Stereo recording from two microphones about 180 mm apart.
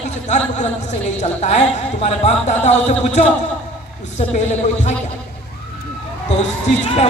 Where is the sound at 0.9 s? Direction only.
40° left (ahead or behind).